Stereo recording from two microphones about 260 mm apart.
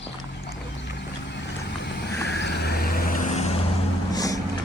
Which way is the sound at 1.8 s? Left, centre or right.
Left.